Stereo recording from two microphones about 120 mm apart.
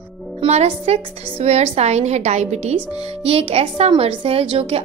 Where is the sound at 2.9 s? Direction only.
55° right (ahead or behind).